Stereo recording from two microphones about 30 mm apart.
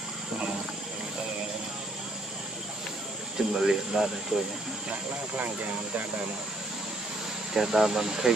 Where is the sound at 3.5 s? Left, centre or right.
Centre.